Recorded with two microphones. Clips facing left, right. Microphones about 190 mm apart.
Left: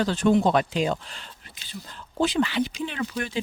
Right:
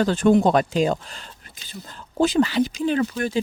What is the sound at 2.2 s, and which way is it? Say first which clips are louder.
Speech: right 5 dB; 40° right (ahead or behind).